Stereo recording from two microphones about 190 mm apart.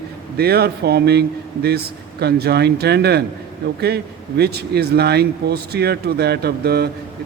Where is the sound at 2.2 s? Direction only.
60° right (ahead or behind).